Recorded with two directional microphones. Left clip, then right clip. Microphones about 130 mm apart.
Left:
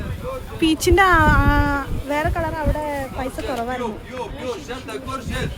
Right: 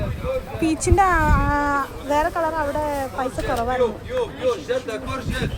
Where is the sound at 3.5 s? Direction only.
40° left (ahead or behind).